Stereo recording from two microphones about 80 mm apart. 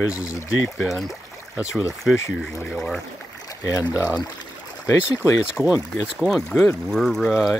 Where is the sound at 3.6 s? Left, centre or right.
Left.